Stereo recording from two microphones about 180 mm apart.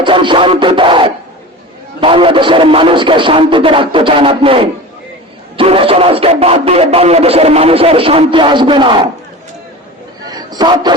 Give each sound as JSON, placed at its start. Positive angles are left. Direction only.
{"t": 0.0, "sound": "music", "side_deg": -25}
{"t": 2.0, "sound": "a man's voice", "side_deg": -30}
{"t": 10.3, "sound": "a sound", "side_deg": -20}